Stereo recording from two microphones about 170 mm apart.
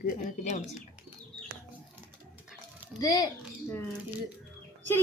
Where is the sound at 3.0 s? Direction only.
20° left (ahead or behind).